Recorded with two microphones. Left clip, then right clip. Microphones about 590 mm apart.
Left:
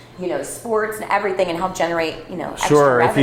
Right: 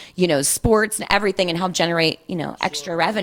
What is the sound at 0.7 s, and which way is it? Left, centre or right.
A woman's voice, right.